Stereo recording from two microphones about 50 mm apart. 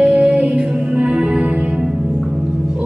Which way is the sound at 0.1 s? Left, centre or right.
Right.